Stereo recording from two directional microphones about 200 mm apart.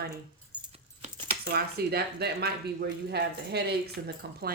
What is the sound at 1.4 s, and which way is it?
A woman's voice, 55° right (ahead or behind).